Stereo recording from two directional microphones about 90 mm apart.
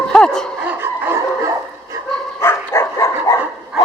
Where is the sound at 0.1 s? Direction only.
10° left (ahead or behind).